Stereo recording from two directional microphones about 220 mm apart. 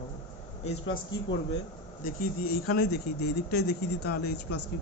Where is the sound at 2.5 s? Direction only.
45° left (ahead or behind).